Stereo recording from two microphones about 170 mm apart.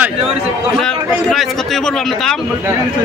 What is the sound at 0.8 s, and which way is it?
A man's voice, centre (ahead or behind).